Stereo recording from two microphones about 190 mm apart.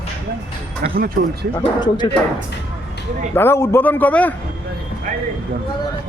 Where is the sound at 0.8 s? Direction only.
50° right (ahead or behind).